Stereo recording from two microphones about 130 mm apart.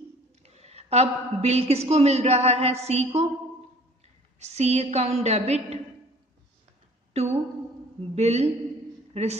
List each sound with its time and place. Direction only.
0.4 s a woman's voice: 55° right (ahead or behind)
4.4 s a woman's voice: 55° right (ahead or behind)
8.1 s a woman's voice: 55° right (ahead or behind)